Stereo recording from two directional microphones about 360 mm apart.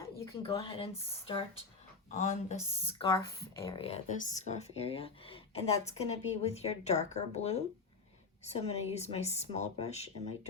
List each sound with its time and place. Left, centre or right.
0.0 s speech: centre